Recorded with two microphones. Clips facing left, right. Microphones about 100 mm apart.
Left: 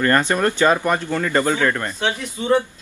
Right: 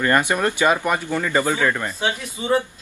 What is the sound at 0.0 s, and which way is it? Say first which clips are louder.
Speech: left 1 dB; 15° right (ahead or behind).